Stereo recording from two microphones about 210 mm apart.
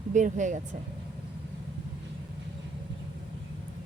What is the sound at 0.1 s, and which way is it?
Speech, 35° right (ahead or behind).